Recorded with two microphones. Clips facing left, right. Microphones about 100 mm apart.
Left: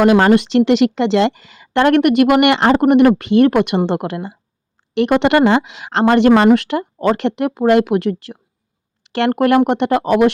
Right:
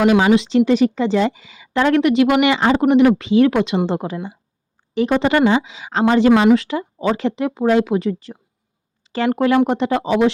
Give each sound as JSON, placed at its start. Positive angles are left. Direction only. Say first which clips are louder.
{"t": 0.0, "sound": "a woman's voice", "louder": "left 3 dB", "side_deg": 55}